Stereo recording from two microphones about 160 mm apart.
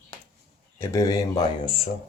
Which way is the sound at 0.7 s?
20° left (ahead or behind).